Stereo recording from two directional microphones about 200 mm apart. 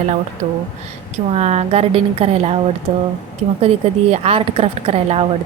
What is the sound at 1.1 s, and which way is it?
Speech, 35° right (ahead or behind).